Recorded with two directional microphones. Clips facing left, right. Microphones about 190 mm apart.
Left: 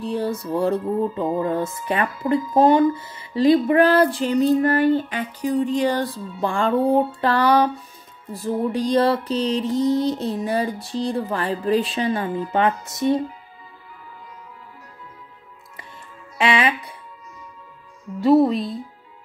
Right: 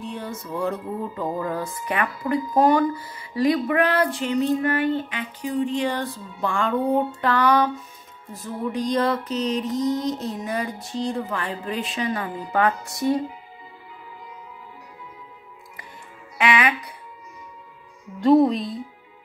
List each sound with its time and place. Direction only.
0.0 s speech: 35° left (ahead or behind)
16.3 s speech: 30° left (ahead or behind)
18.2 s speech: centre (ahead or behind)